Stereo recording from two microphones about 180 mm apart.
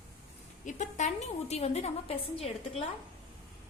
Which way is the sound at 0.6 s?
40° left (ahead or behind).